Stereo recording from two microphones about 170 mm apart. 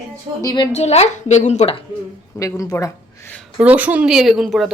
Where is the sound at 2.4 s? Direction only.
20° left (ahead or behind).